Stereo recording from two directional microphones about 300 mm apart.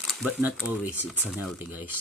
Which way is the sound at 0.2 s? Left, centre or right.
Centre.